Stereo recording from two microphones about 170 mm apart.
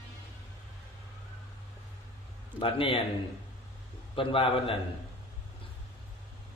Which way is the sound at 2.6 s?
30° left (ahead or behind).